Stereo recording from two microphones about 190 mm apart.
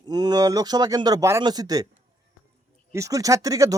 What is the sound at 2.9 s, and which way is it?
Speech, 15° right (ahead or behind).